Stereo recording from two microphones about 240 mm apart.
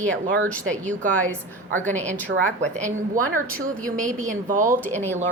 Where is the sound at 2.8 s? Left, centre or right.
Centre.